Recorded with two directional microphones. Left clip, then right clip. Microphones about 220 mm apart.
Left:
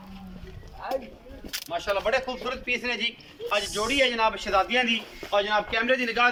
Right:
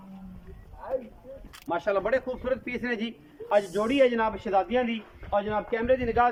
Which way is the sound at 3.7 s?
35° right (ahead or behind).